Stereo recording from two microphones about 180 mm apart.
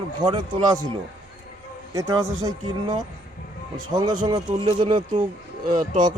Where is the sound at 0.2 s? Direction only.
25° right (ahead or behind).